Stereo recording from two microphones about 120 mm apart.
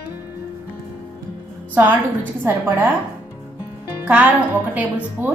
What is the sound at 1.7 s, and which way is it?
A woman's voice, 15° right (ahead or behind).